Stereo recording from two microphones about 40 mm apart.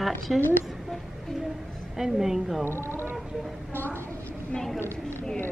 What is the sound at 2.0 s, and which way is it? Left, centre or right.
Speech, centre.